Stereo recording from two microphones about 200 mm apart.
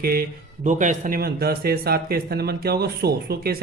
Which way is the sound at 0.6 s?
40° right (ahead or behind).